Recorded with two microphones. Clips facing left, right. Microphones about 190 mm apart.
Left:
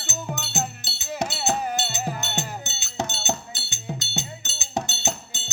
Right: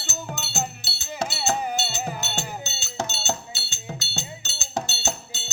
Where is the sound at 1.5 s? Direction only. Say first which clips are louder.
Even; centre (ahead or behind).